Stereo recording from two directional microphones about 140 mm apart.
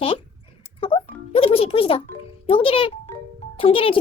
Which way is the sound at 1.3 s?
40° left (ahead or behind).